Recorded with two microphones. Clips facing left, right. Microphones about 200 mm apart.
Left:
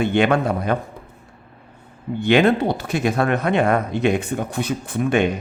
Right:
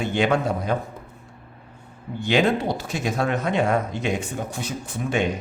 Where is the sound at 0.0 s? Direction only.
60° left (ahead or behind).